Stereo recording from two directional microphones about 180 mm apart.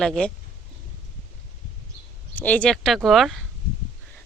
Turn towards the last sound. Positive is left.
turn(degrees=0)  # may be behind; listen again after turning